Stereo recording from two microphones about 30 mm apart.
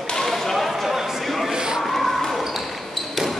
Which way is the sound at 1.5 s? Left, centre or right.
Right.